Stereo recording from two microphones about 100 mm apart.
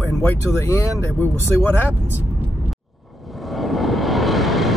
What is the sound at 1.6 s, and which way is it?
Speech, 20° left (ahead or behind).